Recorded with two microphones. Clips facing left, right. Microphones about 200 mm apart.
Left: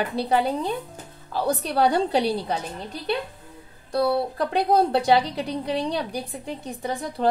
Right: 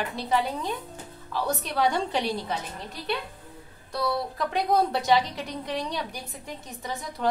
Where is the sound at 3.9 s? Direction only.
30° left (ahead or behind).